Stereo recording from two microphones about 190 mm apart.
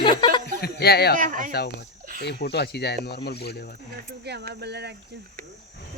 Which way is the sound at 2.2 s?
60° left (ahead or behind).